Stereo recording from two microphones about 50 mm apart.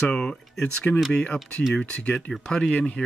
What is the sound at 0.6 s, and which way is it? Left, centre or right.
Speech, left.